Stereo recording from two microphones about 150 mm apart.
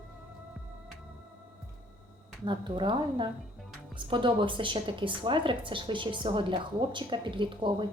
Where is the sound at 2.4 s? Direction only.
30° right (ahead or behind).